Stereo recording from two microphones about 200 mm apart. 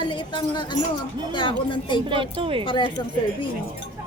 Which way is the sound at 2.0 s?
25° right (ahead or behind).